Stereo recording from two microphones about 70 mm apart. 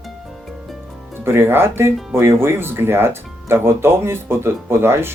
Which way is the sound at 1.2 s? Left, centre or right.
Right.